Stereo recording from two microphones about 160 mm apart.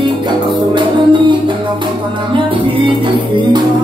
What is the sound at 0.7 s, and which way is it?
Music, 30° right (ahead or behind).